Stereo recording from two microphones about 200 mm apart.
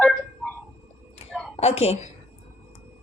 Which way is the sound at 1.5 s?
30° left (ahead or behind).